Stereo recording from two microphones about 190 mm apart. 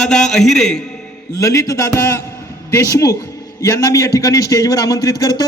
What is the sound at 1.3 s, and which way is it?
A man's voice, 15° left (ahead or behind).